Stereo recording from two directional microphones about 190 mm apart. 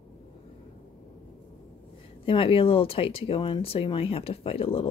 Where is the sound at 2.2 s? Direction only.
30° left (ahead or behind).